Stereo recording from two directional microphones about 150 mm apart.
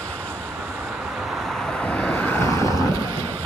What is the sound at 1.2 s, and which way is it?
Vehicle, centre (ahead or behind).